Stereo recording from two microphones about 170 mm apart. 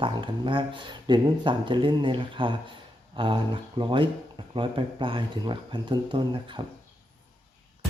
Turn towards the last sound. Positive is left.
turn(degrees=-30)  # may be behind; listen again after turning